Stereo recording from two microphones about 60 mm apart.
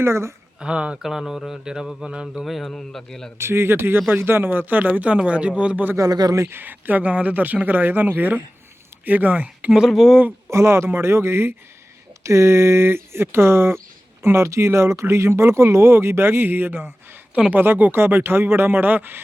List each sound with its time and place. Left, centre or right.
0.0 s speech: right
0.6 s mantra: centre
1.0 s mantra: centre
2.4 s a man's voice: centre
3.3 s speech: right
6.0 s speech: right
6.5 s speech: right
9.9 s speech: centre
10.5 s speech: right